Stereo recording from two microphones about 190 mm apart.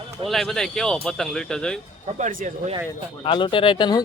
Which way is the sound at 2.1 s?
40° right (ahead or behind).